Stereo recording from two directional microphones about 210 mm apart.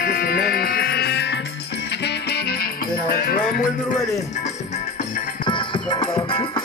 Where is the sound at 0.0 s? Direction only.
45° left (ahead or behind).